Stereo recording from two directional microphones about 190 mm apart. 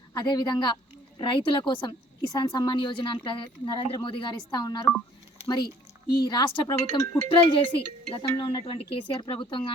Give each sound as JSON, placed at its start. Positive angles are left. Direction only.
{"t": 0.1, "sound": "a woman's voice", "side_deg": 20}
{"t": 6.2, "sound": "a woman's voice", "side_deg": 25}